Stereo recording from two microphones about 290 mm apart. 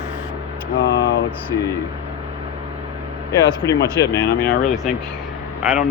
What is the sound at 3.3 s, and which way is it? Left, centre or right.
Speech, centre.